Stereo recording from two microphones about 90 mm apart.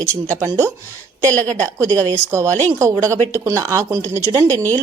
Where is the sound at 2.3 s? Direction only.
30° right (ahead or behind).